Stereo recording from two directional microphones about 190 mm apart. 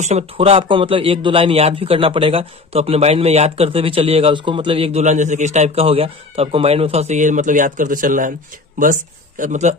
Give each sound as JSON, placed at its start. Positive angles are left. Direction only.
{"t": 0.0, "sound": "a man's voice", "side_deg": -35}
{"t": 9.4, "sound": "a man's voice", "side_deg": -40}